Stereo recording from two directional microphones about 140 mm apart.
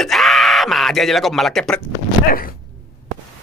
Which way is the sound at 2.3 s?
90° left.